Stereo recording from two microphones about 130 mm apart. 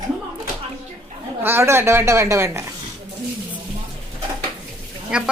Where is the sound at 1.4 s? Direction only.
20° right (ahead or behind).